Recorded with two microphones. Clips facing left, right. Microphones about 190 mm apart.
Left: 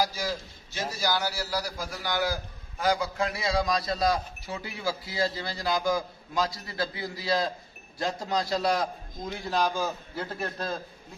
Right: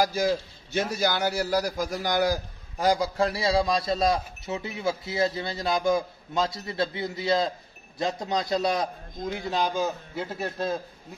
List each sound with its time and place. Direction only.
0.0 s a man's voice: 55° right (ahead or behind); by 10.7 s 25° right (ahead or behind)